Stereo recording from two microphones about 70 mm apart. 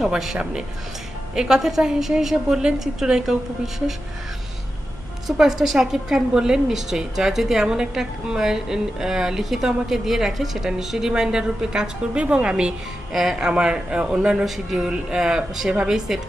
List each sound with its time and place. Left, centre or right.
0.0 s a woman's voice: centre
5.4 s a woman's voice: centre